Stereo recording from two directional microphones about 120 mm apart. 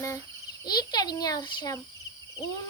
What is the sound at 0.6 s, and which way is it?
Child singing, 35° left (ahead or behind).